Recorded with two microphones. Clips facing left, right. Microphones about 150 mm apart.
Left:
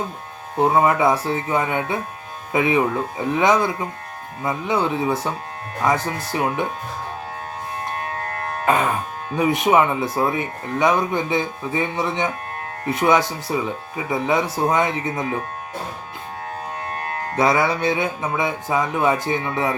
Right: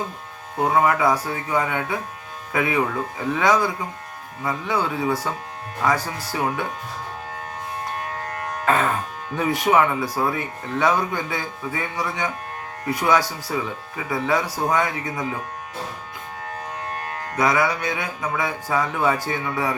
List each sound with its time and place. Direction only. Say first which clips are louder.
0.6 s speech: left 2 dB; 25° left (ahead or behind)
8.6 s speech: left 1 dB; 15° left (ahead or behind)
17.3 s speech: left 2 dB; 30° left (ahead or behind)